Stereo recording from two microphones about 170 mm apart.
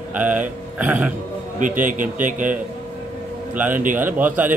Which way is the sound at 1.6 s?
50° right (ahead or behind).